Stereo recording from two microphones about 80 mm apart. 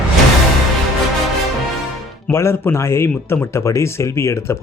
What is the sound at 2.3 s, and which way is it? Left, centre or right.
Speech, left.